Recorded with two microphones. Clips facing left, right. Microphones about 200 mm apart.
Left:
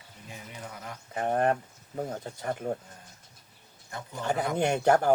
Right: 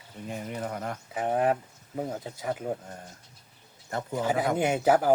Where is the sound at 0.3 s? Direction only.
55° right (ahead or behind).